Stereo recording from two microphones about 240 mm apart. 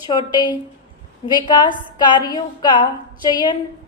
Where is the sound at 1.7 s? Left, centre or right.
Centre.